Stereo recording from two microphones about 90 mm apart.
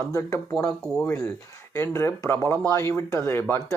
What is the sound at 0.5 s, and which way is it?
Speech, 5° left (ahead or behind).